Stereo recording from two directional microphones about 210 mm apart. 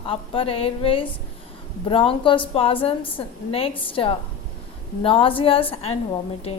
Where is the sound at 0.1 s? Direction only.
25° left (ahead or behind).